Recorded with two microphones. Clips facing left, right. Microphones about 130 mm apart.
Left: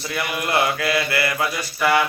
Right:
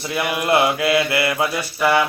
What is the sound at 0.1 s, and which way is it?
Mantra, 20° right (ahead or behind).